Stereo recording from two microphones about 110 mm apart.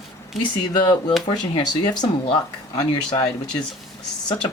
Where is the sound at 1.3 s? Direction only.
45° left (ahead or behind).